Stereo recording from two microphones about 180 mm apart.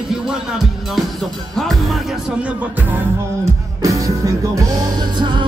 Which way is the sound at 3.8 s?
20° right (ahead or behind).